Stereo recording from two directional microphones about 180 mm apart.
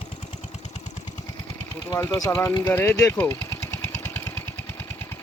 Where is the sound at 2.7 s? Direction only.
10° left (ahead or behind).